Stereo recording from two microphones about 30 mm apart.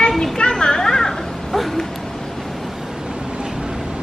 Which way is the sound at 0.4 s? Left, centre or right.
Left.